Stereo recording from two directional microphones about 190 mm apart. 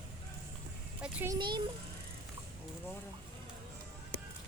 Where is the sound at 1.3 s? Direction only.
25° right (ahead or behind).